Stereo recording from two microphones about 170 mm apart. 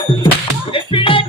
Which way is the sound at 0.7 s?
30° left (ahead or behind).